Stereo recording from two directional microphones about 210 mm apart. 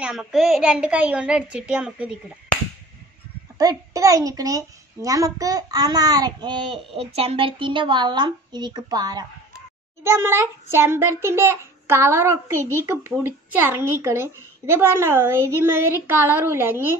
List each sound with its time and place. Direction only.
0.0 s a child's voice: 5° right (ahead or behind)
3.5 s a woman's voice: 15° right (ahead or behind)